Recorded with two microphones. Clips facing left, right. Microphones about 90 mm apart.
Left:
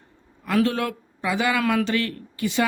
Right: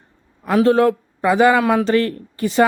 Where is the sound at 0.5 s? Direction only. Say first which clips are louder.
Right 8 dB; 30° right (ahead or behind).